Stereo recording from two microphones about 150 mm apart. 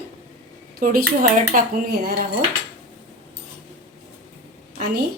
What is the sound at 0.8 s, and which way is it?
Speech, 75° right (ahead or behind).